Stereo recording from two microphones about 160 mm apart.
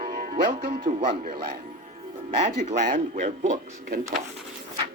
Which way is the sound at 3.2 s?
50° right (ahead or behind).